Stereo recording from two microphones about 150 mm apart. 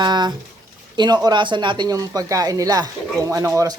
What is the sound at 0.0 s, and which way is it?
Speech, 30° right (ahead or behind).